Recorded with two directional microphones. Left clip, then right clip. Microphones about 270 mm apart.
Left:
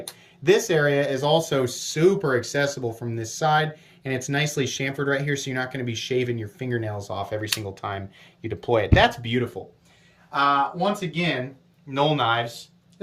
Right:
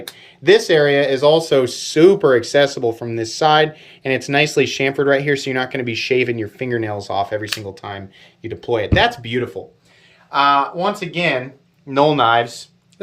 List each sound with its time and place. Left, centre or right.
0.4 s speech: centre
11.9 s speech: centre